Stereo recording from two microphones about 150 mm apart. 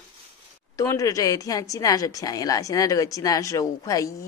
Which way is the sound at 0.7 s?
20° left (ahead or behind).